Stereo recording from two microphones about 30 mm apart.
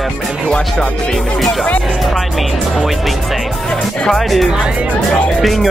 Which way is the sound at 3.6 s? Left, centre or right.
Centre.